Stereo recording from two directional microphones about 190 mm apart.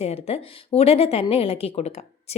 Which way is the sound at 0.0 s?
30° left (ahead or behind).